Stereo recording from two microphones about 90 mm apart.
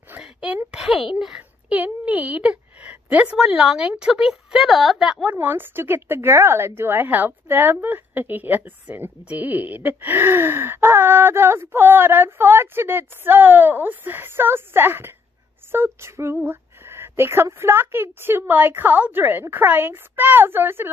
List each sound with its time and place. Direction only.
0.2 s a sound: 10° right (ahead or behind)
0.7 s a child's voice: 10° right (ahead or behind)
5.3 s a woman's voice: 20° right (ahead or behind)